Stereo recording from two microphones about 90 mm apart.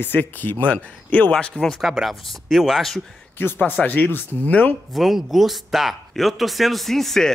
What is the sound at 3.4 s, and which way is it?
Speech, 20° left (ahead or behind).